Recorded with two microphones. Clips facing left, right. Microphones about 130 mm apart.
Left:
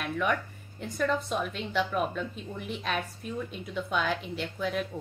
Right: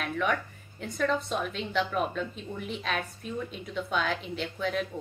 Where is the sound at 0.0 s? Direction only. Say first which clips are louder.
Even; centre (ahead or behind).